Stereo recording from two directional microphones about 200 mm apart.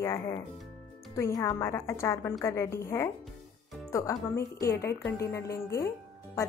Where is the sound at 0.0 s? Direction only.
15° left (ahead or behind).